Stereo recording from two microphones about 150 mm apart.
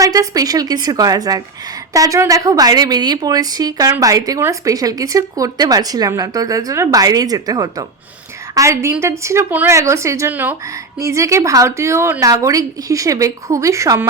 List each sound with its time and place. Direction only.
0.0 s a woman's voice: 25° right (ahead or behind)